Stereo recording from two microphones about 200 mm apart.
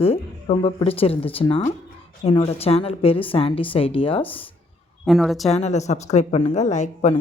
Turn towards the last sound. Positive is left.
turn(degrees=35)  # may be behind; listen again after turning